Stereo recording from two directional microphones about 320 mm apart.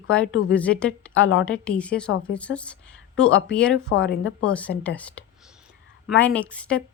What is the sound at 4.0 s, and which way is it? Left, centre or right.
Speech, left.